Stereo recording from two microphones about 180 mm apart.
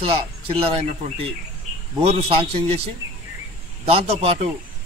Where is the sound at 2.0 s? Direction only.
35° right (ahead or behind).